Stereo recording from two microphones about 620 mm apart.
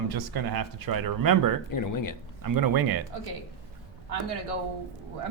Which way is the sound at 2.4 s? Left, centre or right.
Right.